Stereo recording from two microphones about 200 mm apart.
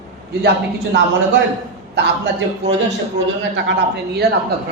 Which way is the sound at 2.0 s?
55° right (ahead or behind).